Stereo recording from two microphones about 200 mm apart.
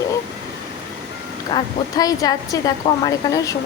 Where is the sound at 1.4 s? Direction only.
20° left (ahead or behind).